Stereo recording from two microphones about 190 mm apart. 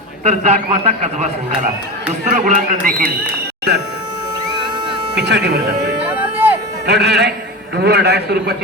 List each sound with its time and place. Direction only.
0.3 s a man's voice: 35° right (ahead or behind)
5.1 s speech: 65° right (ahead or behind)
6.3 s a sound: 10° right (ahead or behind)
6.8 s speech: 60° right (ahead or behind)